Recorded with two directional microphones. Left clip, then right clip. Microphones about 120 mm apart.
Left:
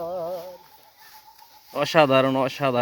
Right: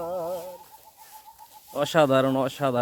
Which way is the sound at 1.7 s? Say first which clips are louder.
Left 3 dB; 5° right (ahead or behind).